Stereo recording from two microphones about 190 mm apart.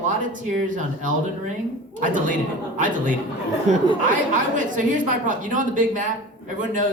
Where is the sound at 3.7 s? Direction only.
40° right (ahead or behind).